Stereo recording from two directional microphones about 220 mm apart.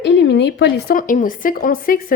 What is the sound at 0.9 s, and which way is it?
A woman's voice, 35° left (ahead or behind).